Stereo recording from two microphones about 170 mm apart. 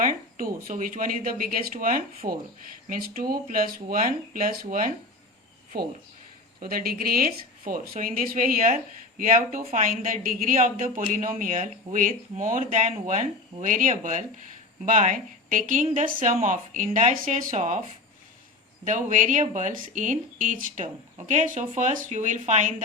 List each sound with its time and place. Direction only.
0.0 s speech: 50° right (ahead or behind)
18.9 s speech: 45° right (ahead or behind)